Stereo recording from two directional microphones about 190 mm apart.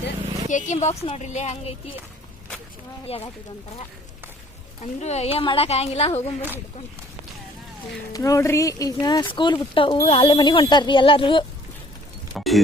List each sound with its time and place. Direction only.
0.4 s a woman's voice: 40° left (ahead or behind)
3.1 s a woman's voice: 30° left (ahead or behind)
4.8 s a woman's voice: 35° left (ahead or behind)
8.1 s speech: 15° left (ahead or behind)
12.3 s music: centre (ahead or behind)